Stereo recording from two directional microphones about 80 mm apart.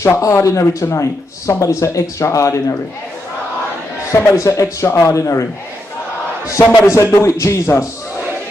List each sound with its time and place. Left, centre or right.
0.2 s speech: left
4.1 s speech: left
6.6 s a man's voice: left
6.9 s speech: left